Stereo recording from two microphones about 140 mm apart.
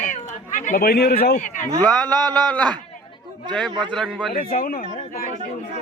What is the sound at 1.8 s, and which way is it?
Speech, centre (ahead or behind).